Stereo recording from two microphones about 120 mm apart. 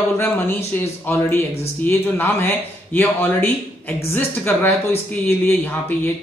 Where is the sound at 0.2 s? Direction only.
15° left (ahead or behind).